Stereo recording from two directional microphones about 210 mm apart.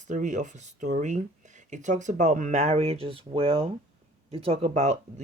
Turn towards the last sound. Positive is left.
turn(degrees=-35)  # may be behind; listen again after turning